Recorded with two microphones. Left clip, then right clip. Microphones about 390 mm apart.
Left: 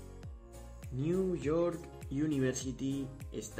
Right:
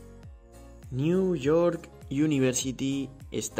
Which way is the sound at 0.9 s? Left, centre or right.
Right.